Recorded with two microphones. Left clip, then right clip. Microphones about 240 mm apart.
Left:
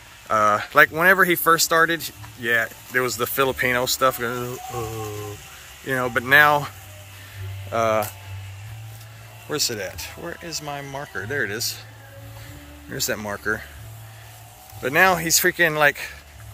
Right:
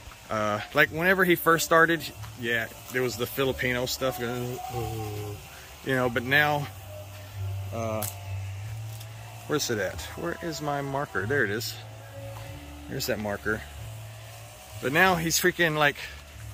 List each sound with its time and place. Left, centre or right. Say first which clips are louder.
0.3 s speech: left 9 dB; centre
5.9 s speech: left 6 dB; centre
7.7 s speech: left 12 dB; left
9.5 s speech: left 2 dB; centre
12.9 s speech: left 3 dB; centre
14.8 s speech: left 5 dB; centre